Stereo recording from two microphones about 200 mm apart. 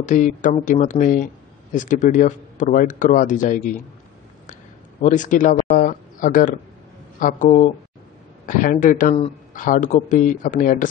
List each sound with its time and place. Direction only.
0.0 s speech: 40° left (ahead or behind)
5.0 s speech: 40° left (ahead or behind)